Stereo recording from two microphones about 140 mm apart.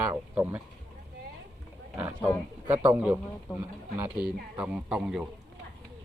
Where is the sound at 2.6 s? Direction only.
15° right (ahead or behind).